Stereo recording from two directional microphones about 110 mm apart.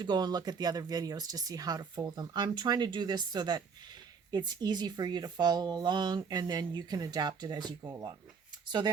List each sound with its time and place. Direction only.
0.0 s speech: 40° right (ahead or behind)